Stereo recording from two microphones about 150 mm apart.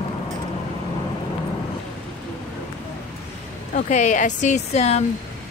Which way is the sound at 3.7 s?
50° left (ahead or behind).